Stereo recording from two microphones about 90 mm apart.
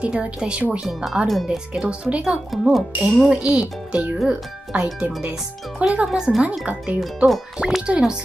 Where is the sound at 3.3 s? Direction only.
15° right (ahead or behind).